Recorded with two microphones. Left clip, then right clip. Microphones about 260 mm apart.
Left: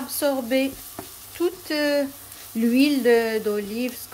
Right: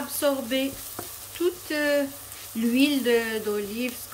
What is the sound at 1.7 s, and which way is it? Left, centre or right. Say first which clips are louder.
Speech: left 2 dB; centre.